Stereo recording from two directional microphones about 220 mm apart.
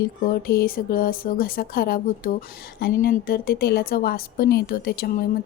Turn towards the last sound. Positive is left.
turn(degrees=45)  # may be behind; listen again after turning